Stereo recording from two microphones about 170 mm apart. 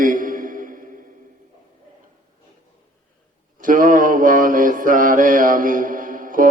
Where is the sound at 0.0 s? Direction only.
50° right (ahead or behind).